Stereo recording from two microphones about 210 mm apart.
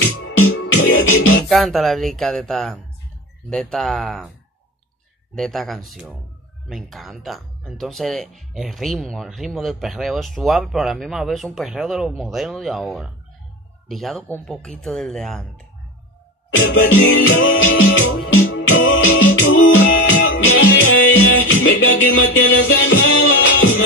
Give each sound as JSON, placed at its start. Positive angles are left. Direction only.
{"t": 0.0, "sound": "music", "side_deg": 65}
{"t": 1.5, "sound": "speech", "side_deg": 0}
{"t": 5.3, "sound": "speech", "side_deg": 0}
{"t": 16.5, "sound": "music", "side_deg": 65}